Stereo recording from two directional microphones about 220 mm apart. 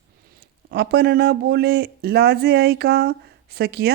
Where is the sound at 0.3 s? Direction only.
45° right (ahead or behind).